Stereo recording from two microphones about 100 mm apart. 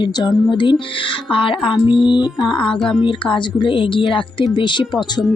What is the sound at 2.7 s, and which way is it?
Speech, 5° left (ahead or behind).